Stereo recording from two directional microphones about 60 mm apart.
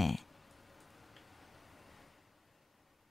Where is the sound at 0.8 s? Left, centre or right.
Centre.